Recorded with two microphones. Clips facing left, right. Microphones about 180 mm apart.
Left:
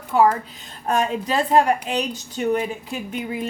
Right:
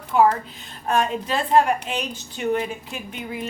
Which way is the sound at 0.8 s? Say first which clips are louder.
Left 1 dB; 40° left (ahead or behind).